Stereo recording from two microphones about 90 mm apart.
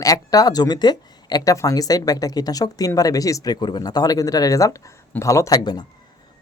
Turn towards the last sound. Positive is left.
turn(degrees=50)  # may be behind; listen again after turning